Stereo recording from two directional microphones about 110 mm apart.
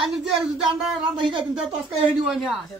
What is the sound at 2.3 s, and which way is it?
Speech, centre (ahead or behind).